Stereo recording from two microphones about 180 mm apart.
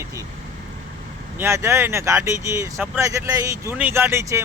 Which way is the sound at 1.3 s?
15° right (ahead or behind).